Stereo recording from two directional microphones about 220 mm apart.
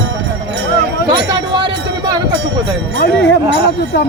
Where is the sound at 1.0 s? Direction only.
20° right (ahead or behind).